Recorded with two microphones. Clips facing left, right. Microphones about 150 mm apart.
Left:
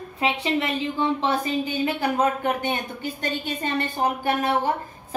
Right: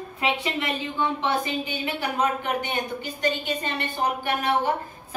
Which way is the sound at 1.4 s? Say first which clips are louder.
Left 4 dB; 40° left (ahead or behind).